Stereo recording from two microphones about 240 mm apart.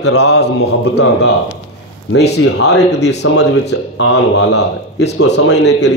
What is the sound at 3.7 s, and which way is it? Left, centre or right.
Speech, left.